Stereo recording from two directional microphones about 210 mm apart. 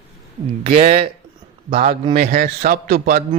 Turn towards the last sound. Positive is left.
turn(degrees=-45)  # may be behind; listen again after turning